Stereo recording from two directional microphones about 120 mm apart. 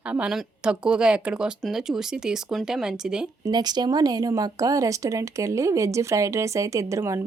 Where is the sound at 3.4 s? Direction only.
35° right (ahead or behind).